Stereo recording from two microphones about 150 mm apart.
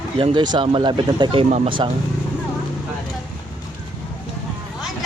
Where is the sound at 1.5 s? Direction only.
50° right (ahead or behind).